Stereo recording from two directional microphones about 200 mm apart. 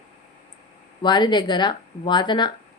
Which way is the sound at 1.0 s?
20° left (ahead or behind).